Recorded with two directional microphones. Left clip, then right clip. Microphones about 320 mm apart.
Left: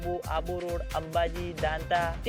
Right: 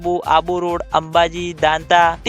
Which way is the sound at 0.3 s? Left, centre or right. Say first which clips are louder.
Right 16 dB; right.